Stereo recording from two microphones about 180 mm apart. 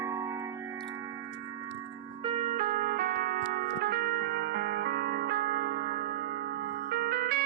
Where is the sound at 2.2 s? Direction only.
35° right (ahead or behind).